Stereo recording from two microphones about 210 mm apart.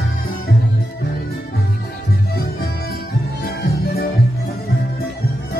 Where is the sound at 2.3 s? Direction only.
45° left (ahead or behind).